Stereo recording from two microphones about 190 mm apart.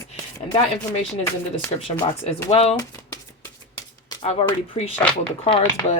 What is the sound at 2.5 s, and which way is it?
Speech, 35° left (ahead or behind).